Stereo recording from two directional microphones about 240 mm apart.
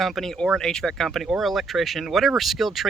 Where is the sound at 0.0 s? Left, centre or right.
Centre.